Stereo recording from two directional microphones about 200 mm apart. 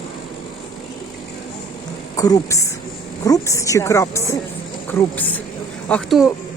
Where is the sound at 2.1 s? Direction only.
15° left (ahead or behind).